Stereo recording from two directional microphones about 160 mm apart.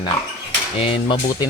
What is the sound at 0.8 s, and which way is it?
Speech, 35° left (ahead or behind).